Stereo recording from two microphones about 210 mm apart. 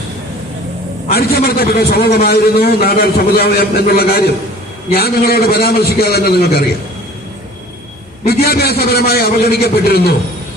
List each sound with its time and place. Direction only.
1.0 s a man's voice: 45° left (ahead or behind)
8.3 s a man's voice: 45° left (ahead or behind)